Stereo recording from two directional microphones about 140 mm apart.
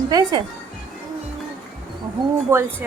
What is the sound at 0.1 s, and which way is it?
Speech, 30° right (ahead or behind).